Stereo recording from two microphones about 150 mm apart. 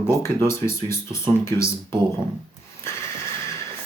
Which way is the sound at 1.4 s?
20° left (ahead or behind).